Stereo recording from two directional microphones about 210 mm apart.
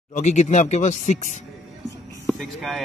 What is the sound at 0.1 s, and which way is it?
Speech, 35° left (ahead or behind).